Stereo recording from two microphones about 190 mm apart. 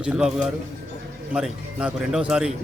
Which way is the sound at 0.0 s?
5° right (ahead or behind).